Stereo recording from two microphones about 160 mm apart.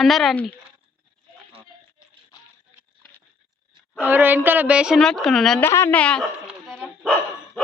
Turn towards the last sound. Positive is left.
turn(degrees=-5)  # may be behind; listen again after turning